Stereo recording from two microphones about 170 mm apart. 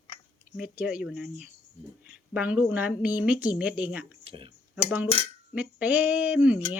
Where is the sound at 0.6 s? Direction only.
5° right (ahead or behind).